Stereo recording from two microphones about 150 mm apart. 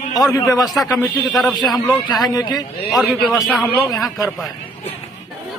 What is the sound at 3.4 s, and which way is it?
Speech, centre (ahead or behind).